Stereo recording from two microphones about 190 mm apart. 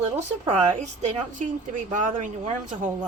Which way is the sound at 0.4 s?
35° right (ahead or behind).